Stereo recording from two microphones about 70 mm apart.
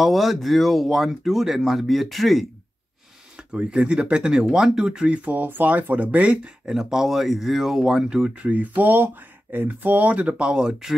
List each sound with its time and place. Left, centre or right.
0.0 s speech: centre
3.5 s speech: centre
8.5 s speech: right; by 11.0 s centre